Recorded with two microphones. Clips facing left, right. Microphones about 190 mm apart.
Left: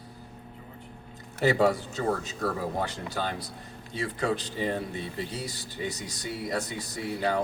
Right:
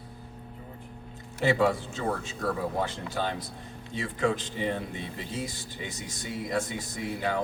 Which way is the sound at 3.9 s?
40° left (ahead or behind).